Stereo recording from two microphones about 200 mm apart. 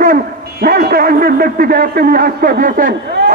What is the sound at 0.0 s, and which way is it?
A man's voice, 45° right (ahead or behind).